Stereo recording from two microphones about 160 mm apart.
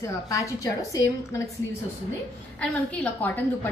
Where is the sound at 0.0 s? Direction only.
20° left (ahead or behind).